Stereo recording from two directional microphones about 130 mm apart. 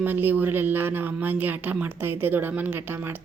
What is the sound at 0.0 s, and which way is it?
A woman's voice, 15° right (ahead or behind).